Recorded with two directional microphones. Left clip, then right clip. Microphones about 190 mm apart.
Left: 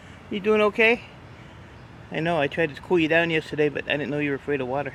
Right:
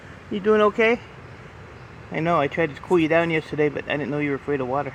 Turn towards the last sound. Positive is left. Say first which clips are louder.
# right 2 dB
turn(degrees=5)  # may be behind; listen again after turning